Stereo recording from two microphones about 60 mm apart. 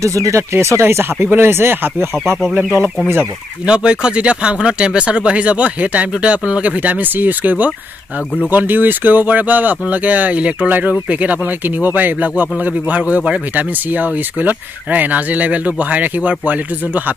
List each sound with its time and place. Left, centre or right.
0.0 s speech: right
3.6 s speech: centre